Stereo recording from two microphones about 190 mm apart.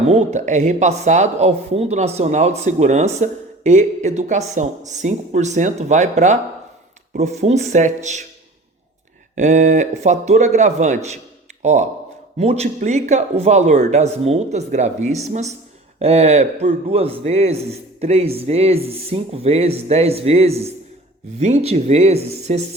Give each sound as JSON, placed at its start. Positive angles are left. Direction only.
{"t": 0.0, "sound": "speech", "side_deg": -35}
{"t": 9.3, "sound": "speech", "side_deg": -40}